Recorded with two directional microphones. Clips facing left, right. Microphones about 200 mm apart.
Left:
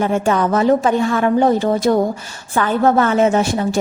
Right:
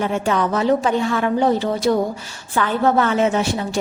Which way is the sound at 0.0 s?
45° left (ahead or behind).